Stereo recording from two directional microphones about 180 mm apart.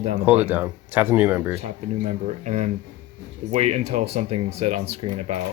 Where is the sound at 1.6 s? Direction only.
40° right (ahead or behind).